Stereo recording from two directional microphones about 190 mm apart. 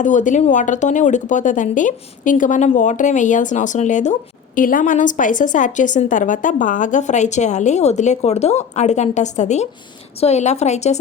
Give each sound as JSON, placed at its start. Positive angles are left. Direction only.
{"t": 0.0, "sound": "a woman's voice", "side_deg": 40}